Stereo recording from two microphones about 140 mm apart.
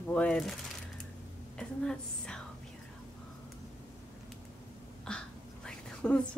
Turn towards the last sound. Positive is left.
turn(degrees=5)  # may be behind; listen again after turning